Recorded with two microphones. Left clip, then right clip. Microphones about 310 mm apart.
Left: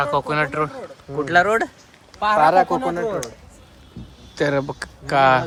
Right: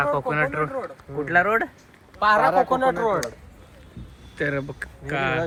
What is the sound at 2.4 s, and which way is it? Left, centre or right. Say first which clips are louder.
Speech: left 4 dB; left.